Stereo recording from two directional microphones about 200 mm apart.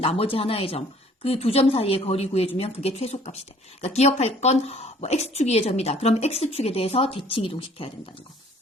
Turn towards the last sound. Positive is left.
turn(degrees=25)  # may be behind; listen again after turning